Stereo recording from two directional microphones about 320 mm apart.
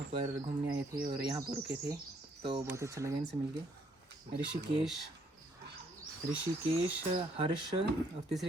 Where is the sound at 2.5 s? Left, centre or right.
Centre.